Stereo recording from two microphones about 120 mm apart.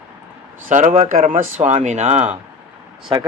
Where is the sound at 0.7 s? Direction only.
90° right.